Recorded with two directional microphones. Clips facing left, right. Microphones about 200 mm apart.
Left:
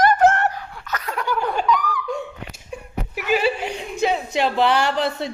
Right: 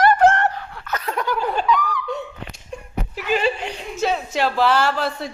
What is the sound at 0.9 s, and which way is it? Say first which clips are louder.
Laughter: right 3 dB; 25° right (ahead or behind).